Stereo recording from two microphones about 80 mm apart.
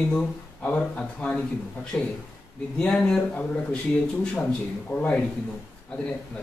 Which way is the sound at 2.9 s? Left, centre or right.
Centre.